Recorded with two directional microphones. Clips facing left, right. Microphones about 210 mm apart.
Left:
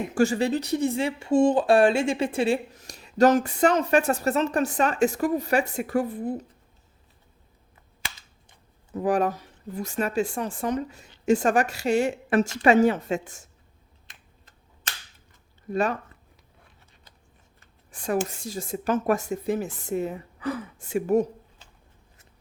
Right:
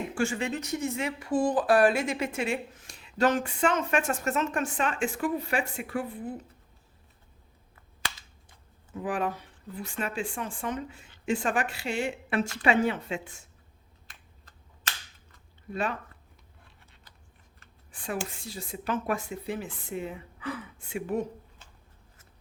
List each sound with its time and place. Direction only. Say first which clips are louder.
0.1 s speech: left 10 dB; 40° left (ahead or behind)
8.9 s speech: left 7 dB; 40° left (ahead or behind)
15.7 s speech: left 6 dB; 45° left (ahead or behind)
17.9 s speech: left 8 dB; 45° left (ahead or behind)